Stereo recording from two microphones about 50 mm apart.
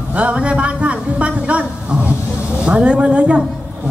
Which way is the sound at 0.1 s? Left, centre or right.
Right.